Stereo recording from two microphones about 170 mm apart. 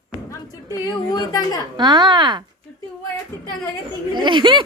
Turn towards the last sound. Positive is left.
turn(degrees=-30)  # may be behind; listen again after turning